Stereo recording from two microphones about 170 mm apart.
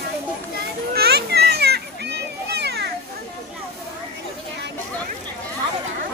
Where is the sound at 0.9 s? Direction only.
70° right (ahead or behind).